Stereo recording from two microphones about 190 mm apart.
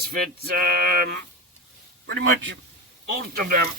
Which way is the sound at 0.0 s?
50° right (ahead or behind).